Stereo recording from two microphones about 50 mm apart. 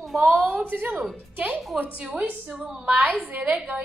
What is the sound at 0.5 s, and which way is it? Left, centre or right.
A woman's voice, right.